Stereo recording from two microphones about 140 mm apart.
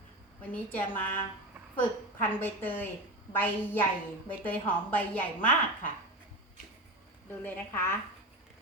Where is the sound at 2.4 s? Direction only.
15° left (ahead or behind).